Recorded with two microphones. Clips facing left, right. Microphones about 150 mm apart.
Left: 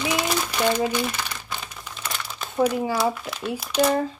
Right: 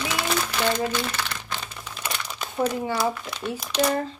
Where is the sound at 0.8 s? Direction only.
15° left (ahead or behind).